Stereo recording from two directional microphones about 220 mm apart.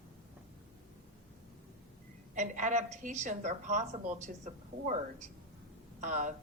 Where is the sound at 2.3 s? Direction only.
35° right (ahead or behind).